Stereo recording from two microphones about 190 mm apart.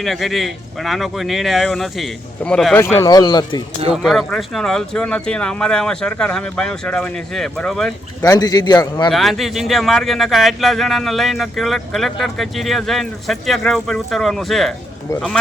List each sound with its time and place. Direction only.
0.0 s speech: centre (ahead or behind); by 3.6 s 20° left (ahead or behind)
3.9 s speech: centre (ahead or behind)
8.2 s speech: 20° left (ahead or behind)
9.0 s speech: centre (ahead or behind)